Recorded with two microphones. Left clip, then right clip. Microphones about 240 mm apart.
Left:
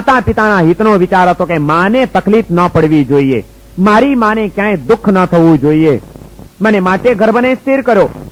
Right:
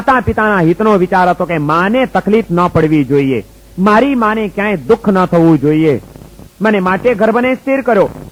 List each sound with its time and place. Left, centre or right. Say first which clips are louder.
0.0 s speech: left 2 dB; left